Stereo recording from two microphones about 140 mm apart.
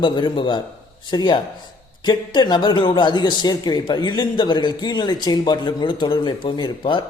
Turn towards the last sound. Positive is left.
turn(degrees=35)  # may be behind; listen again after turning